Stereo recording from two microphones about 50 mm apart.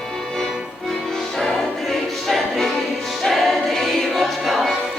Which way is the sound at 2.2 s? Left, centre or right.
Centre.